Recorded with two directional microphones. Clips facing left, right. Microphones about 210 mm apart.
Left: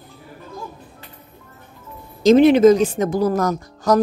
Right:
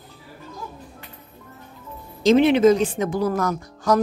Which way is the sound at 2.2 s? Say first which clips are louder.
Left 4 dB; 40° left (ahead or behind).